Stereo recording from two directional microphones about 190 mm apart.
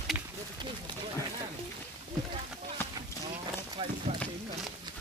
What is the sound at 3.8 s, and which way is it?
Run, 25° right (ahead or behind).